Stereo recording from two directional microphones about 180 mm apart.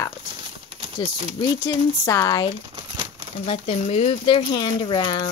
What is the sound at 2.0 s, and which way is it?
Speech, 15° left (ahead or behind).